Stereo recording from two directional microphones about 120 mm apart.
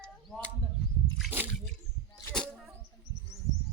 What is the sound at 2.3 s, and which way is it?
Arrow, 5° left (ahead or behind).